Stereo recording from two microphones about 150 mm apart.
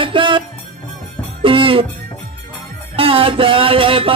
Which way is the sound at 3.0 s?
35° right (ahead or behind).